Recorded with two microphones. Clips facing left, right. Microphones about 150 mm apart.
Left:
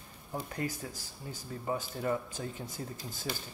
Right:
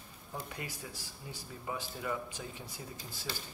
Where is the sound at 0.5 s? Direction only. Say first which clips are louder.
Left 7 dB; 45° left (ahead or behind).